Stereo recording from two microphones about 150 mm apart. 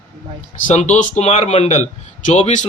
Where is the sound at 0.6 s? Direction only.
50° left (ahead or behind).